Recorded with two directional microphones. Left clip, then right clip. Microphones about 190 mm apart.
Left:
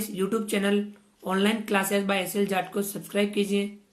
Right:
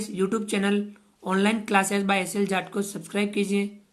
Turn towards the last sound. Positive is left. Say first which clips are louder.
# even
turn(degrees=-25)  # may be behind; listen again after turning